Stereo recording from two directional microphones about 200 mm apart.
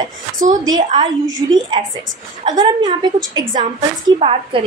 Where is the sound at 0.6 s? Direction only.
20° right (ahead or behind).